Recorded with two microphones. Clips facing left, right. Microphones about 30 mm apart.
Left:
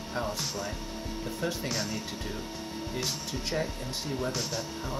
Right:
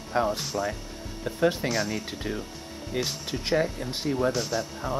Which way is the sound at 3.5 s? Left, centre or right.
Right.